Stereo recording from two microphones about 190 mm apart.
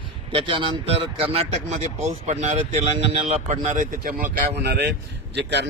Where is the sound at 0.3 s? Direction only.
25° right (ahead or behind).